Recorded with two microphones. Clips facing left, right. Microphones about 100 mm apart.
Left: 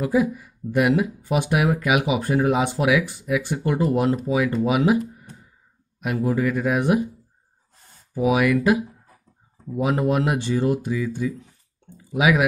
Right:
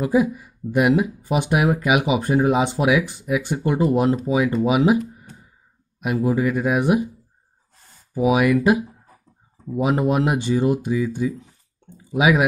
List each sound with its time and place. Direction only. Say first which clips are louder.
0.0 s speech: right 2 dB; 20° right (ahead or behind)
8.1 s speech: right 2 dB; 20° right (ahead or behind)
9.8 s speech: right 2 dB; 20° right (ahead or behind)